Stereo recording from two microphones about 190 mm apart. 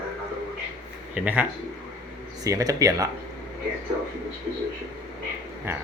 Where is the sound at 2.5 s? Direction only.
15° right (ahead or behind).